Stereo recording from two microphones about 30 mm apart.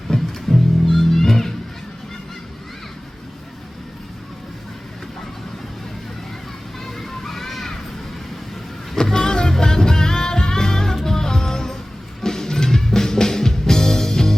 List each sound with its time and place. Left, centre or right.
0.1 s music: centre
6.8 s music: centre
9.1 s music: left